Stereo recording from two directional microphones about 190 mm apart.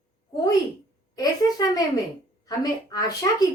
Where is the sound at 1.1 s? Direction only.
20° left (ahead or behind).